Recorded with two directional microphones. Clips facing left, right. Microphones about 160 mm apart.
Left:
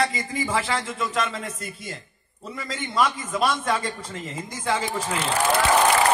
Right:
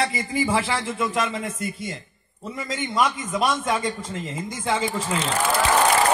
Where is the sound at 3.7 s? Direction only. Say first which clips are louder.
Right 1 dB; 25° right (ahead or behind).